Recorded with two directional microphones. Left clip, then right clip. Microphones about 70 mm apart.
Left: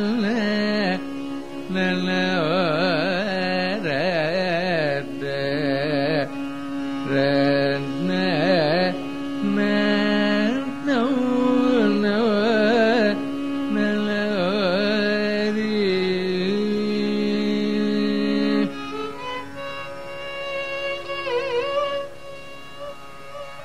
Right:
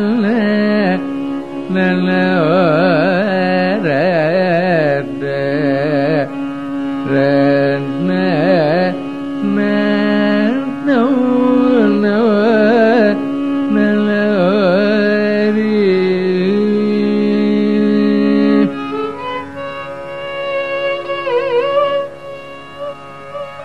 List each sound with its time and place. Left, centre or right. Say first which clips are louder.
0.0 s carnatic music: right 8 dB; left
9.4 s music: right 6 dB; left
10.5 s carnatic music: right 8 dB; left
12.0 s carnatic music: right 8 dB; left
14.4 s carnatic music: right 9 dB; left
16.4 s music: right 9 dB; left
18.0 s music: right 9 dB; left
20.5 s music: right 10 dB; left